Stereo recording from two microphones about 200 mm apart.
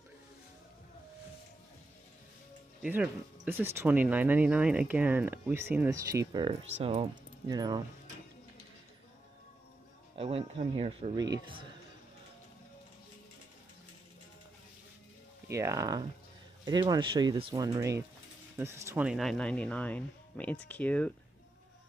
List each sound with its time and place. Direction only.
2.8 s speech: 5° right (ahead or behind)
10.1 s speech: 30° right (ahead or behind)
15.4 s speech: 15° right (ahead or behind); by 21.1 s 5° left (ahead or behind)